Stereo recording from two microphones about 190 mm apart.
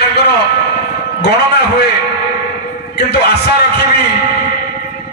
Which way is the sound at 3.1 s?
55° left (ahead or behind).